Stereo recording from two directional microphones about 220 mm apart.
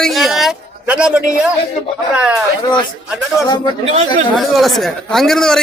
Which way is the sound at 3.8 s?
30° right (ahead or behind).